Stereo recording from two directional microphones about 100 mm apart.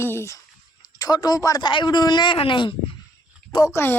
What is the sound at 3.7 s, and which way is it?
Speech, 20° left (ahead or behind).